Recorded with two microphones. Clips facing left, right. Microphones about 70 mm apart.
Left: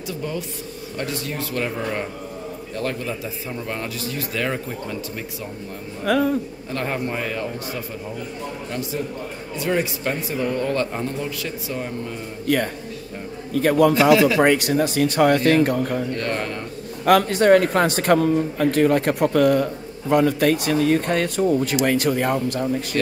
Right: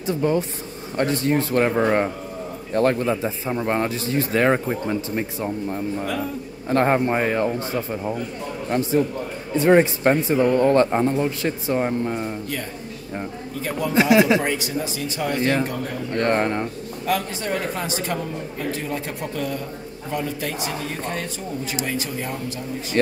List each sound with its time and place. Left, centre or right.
0.0 s a man's voice: right
6.0 s speech: left
6.7 s a man's voice: right
13.5 s speech: left
14.1 s speech: right
14.4 s speech: left
16.1 s a man's voice: right
17.0 s speech: left